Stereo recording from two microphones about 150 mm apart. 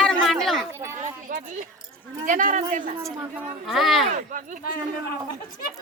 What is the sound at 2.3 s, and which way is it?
Speech, 60° right (ahead or behind).